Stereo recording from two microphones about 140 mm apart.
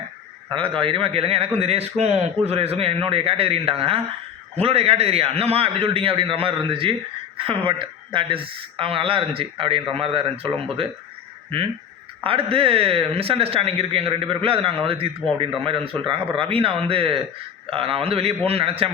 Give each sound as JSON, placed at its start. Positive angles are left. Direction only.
{"t": 0.5, "sound": "a man's voice", "side_deg": -40}
{"t": 12.2, "sound": "a man's voice", "side_deg": -40}